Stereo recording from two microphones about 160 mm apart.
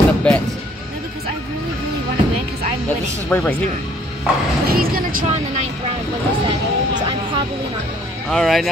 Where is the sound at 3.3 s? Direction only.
15° left (ahead or behind).